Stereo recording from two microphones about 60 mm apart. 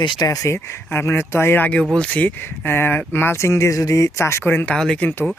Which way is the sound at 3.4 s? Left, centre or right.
Left.